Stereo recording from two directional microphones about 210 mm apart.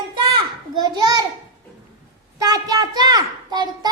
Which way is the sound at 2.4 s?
20° right (ahead or behind).